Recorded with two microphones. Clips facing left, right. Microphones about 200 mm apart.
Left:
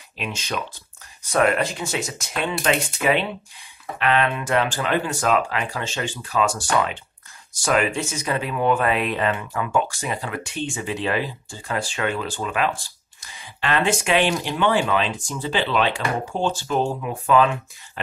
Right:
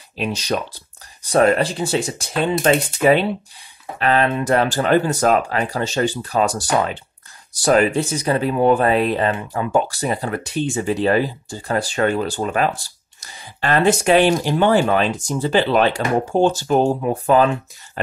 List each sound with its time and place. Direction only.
0.2 s speech: 35° right (ahead or behind)